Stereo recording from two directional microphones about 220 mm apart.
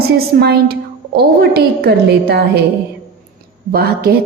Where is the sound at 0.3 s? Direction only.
45° right (ahead or behind).